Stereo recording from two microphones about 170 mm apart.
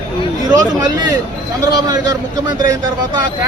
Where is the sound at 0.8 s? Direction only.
25° right (ahead or behind).